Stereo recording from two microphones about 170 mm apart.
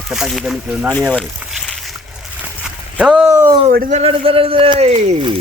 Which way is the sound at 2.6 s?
5° right (ahead or behind).